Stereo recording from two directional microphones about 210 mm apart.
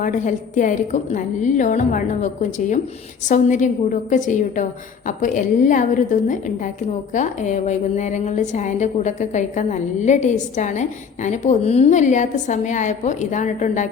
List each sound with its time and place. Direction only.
0.0 s a woman's voice: 35° left (ahead or behind)